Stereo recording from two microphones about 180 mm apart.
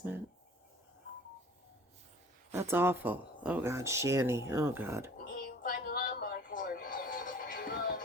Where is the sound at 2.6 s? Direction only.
15° right (ahead or behind).